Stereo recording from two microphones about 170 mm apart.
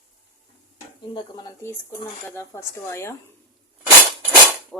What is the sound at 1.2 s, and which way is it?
Speech, 25° left (ahead or behind).